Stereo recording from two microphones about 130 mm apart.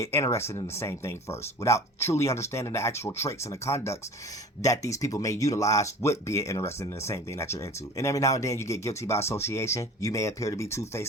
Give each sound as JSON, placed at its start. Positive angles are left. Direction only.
{"t": 0.0, "sound": "speech", "side_deg": 20}